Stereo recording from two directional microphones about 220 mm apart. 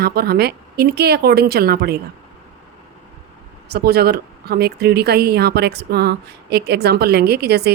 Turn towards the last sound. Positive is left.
turn(degrees=-45)  # may be behind; listen again after turning